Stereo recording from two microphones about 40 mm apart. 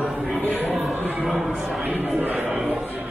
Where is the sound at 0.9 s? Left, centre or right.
Right.